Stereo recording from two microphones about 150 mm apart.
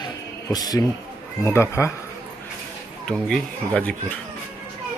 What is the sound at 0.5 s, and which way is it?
Speech, 25° left (ahead or behind).